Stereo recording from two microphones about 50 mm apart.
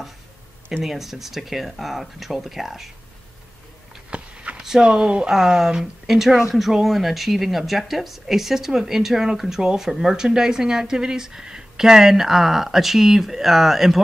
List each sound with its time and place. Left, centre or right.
0.8 s speech: centre
4.1 s walk: right
4.6 s speech: centre